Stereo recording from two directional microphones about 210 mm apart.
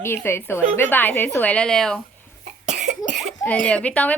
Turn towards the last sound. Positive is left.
turn(degrees=5)  # may be behind; listen again after turning